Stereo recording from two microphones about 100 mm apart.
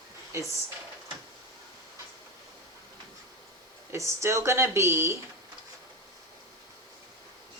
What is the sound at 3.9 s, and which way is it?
A woman's voice, 30° right (ahead or behind).